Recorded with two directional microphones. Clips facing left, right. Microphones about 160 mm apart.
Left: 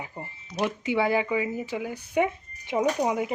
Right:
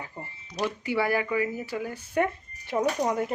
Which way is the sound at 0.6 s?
20° left (ahead or behind).